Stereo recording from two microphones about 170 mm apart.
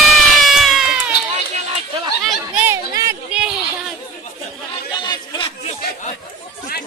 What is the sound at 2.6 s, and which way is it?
Chatter, 15° right (ahead or behind).